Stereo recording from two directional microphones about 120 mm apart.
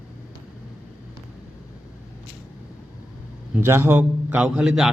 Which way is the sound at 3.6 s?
20° right (ahead or behind).